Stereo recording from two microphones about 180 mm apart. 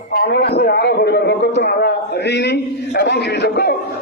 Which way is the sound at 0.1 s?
60° left (ahead or behind).